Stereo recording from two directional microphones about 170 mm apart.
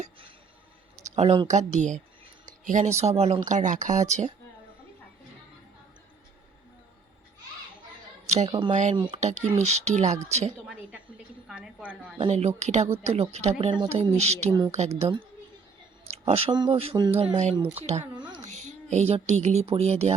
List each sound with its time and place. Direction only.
1.0 s speech: 40° right (ahead or behind)
8.4 s speech: 30° right (ahead or behind)
8.7 s speech: 45° right (ahead or behind)
11.4 s a woman's voice: 5° right (ahead or behind)
12.1 s speech: 35° right (ahead or behind)
18.2 s a sound: 25° right (ahead or behind)
18.9 s speech: 40° right (ahead or behind)